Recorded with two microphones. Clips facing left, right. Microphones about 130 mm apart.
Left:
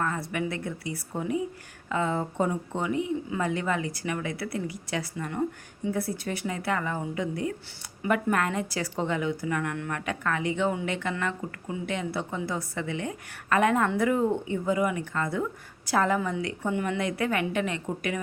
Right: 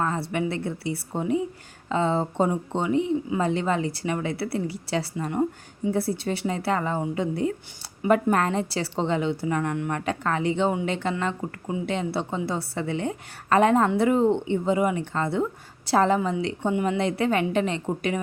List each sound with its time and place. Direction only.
0.0 s a woman's voice: 25° right (ahead or behind)